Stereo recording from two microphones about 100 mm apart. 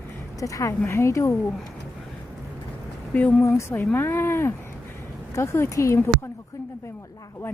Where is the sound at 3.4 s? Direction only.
30° left (ahead or behind).